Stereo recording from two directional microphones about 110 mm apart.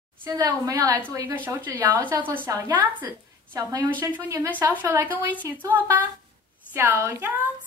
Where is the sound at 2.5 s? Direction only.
40° right (ahead or behind).